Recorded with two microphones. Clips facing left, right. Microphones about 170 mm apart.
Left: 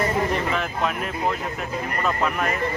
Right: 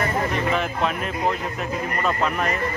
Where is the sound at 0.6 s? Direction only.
Centre (ahead or behind).